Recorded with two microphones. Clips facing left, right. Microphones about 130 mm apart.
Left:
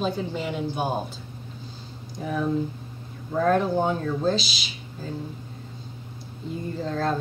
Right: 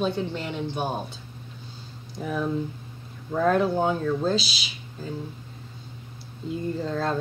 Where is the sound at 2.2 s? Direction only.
5° left (ahead or behind).